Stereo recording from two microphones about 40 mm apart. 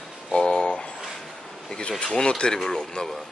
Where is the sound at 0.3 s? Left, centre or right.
Centre.